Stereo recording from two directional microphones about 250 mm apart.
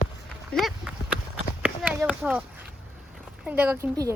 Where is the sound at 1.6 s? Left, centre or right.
Centre.